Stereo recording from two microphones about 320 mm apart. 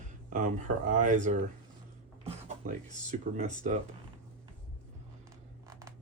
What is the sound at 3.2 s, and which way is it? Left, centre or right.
Speech, right.